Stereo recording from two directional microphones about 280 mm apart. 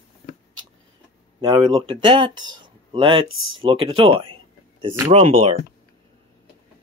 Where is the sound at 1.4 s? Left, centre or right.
Centre.